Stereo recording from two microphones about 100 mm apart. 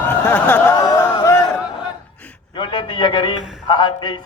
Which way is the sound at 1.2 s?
25° left (ahead or behind).